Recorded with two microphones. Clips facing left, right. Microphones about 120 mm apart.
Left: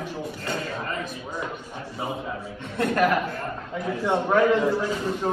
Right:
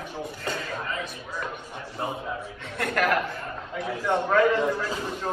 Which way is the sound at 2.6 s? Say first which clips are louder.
Left 5 dB; 15° left (ahead or behind).